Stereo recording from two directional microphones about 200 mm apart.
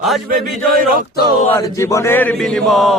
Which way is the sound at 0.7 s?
45° right (ahead or behind).